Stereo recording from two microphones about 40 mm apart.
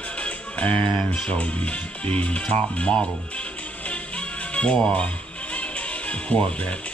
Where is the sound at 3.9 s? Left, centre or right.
Left.